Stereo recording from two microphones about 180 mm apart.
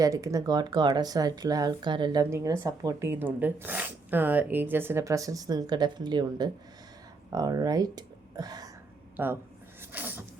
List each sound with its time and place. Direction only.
0.0 s speech: 20° right (ahead or behind)
9.1 s a man's voice: 10° right (ahead or behind)
9.9 s a sound: 10° right (ahead or behind)